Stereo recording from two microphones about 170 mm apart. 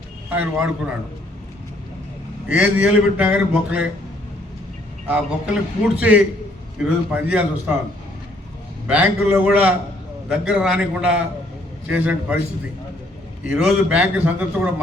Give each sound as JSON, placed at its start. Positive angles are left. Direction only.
{"t": 0.3, "sound": "speech", "side_deg": -10}
{"t": 2.5, "sound": "speech", "side_deg": -5}
{"t": 5.0, "sound": "speech", "side_deg": -10}
{"t": 8.9, "sound": "a man's voice", "side_deg": -10}
{"t": 13.5, "sound": "speech", "side_deg": -5}